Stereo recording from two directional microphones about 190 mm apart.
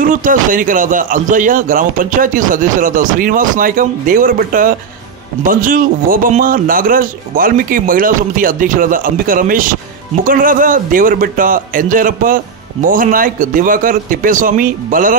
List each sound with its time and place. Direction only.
0.0 s speech: 45° right (ahead or behind)